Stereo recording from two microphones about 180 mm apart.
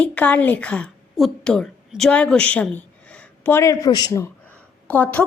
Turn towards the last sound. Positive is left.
turn(degrees=10)  # may be behind; listen again after turning